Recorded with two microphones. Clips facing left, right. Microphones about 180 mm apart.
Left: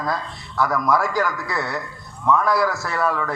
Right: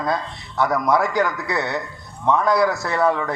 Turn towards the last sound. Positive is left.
turn(degrees=-20)  # may be behind; listen again after turning